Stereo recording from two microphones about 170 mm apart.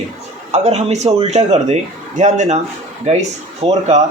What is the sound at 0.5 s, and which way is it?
A man's voice, 40° right (ahead or behind).